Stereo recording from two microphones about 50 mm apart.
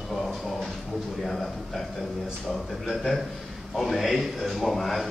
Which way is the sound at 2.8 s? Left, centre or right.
Centre.